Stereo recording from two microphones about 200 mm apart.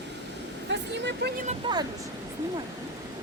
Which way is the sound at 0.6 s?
60° right (ahead or behind).